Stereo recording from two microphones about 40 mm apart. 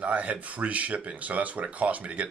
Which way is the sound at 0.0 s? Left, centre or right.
Right.